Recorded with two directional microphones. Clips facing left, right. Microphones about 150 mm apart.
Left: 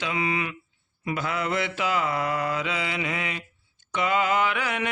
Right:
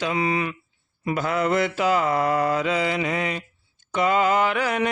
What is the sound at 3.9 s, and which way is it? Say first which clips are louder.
Mantra: right 4 dB; 40° right (ahead or behind).